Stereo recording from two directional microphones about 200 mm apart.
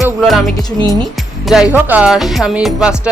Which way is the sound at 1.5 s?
5° right (ahead or behind).